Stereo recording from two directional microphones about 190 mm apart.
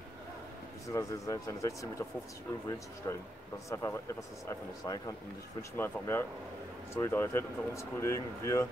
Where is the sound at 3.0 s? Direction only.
20° left (ahead or behind).